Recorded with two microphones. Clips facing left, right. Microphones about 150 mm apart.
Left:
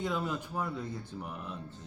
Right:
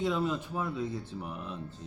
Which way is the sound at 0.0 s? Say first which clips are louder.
Right 4 dB; centre (ahead or behind).